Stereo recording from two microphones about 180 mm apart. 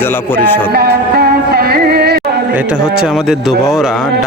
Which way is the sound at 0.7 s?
60° right (ahead or behind).